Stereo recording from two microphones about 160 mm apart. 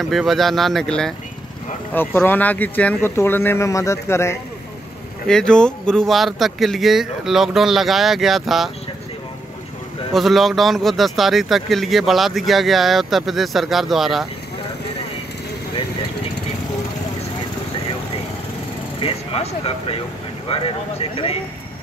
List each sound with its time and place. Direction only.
0.0 s speech: centre (ahead or behind); by 4.4 s 15° left (ahead or behind)
5.3 s speech: 5° left (ahead or behind)
10.1 s speech: centre (ahead or behind)
18.9 s speech: 35° left (ahead or behind)